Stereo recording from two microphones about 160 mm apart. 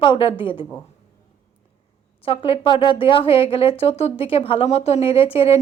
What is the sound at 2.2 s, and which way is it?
Speech, 35° left (ahead or behind).